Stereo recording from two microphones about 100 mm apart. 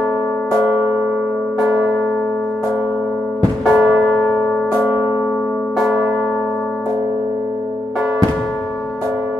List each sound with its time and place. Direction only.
1.6 s church bell: 10° right (ahead or behind)
3.7 s church bell: 10° right (ahead or behind)
5.8 s church bell: centre (ahead or behind)